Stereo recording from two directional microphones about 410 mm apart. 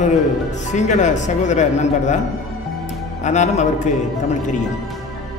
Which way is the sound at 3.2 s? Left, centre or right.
Centre.